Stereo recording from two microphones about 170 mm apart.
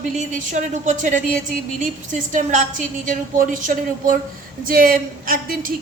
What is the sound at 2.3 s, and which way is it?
A woman's voice, 50° right (ahead or behind).